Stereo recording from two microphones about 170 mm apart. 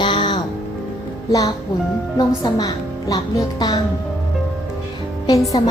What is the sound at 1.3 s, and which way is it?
A woman's voice, 20° left (ahead or behind).